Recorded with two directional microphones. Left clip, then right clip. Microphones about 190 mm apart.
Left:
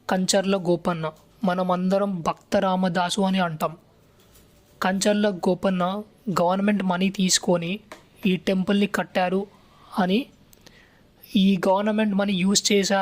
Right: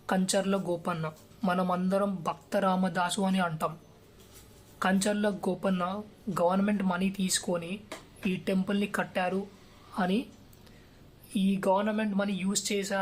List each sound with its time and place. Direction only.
0.0 s speech: 40° left (ahead or behind)
4.8 s speech: 40° left (ahead or behind)
11.3 s speech: 45° left (ahead or behind)